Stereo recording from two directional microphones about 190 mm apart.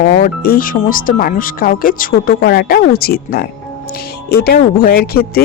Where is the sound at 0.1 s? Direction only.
50° left (ahead or behind).